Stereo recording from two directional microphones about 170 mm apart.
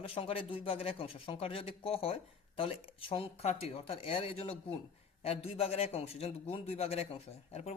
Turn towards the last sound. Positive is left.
turn(degrees=40)  # may be behind; listen again after turning